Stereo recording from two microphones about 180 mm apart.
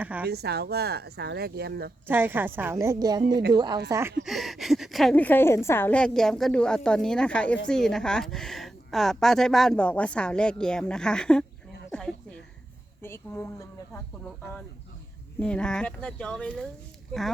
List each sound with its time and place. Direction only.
0.0 s a sound: 10° right (ahead or behind)
0.3 s speech: 65° right (ahead or behind)
2.0 s speech: 10° right (ahead or behind)
3.2 s speech: 70° right (ahead or behind)
3.5 s speech: 25° right (ahead or behind)
4.2 s a woman's voice: centre (ahead or behind)
11.9 s a sound: 5° left (ahead or behind)
13.0 s a woman's voice: 10° left (ahead or behind)
15.4 s a woman's voice: 5° left (ahead or behind)